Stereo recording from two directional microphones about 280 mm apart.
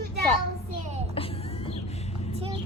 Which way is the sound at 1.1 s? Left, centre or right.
Centre.